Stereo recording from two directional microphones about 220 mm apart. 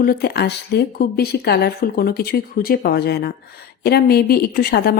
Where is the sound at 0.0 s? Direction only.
45° left (ahead or behind).